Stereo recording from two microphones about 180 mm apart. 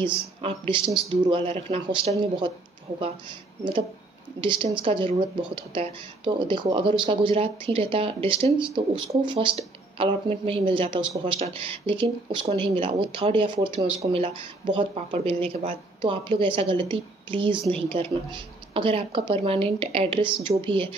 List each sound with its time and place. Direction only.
0.0 s speech: 30° right (ahead or behind)
4.4 s speech: 30° right (ahead or behind)